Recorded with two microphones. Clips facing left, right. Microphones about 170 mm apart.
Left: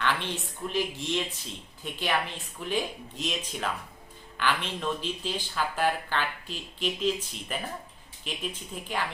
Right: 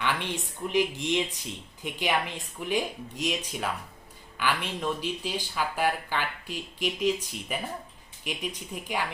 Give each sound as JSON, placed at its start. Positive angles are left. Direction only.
{"t": 0.0, "sound": "speech", "side_deg": -15}